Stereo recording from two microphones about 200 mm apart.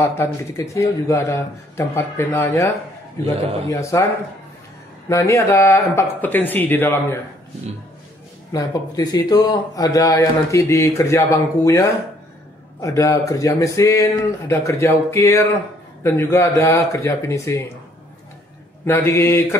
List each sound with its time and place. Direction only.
0.0 s a man's voice: 10° left (ahead or behind)
5.0 s a man's voice: 15° left (ahead or behind)
8.5 s a man's voice: 20° left (ahead or behind)
12.8 s a man's voice: 15° left (ahead or behind)
18.9 s a man's voice: 10° left (ahead or behind)